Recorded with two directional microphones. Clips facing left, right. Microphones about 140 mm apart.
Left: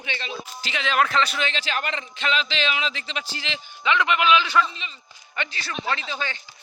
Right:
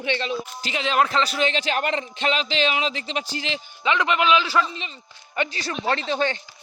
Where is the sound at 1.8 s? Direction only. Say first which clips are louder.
Right 4 dB; 45° right (ahead or behind).